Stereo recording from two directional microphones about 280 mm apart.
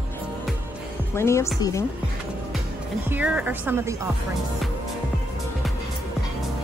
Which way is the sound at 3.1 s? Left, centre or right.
Centre.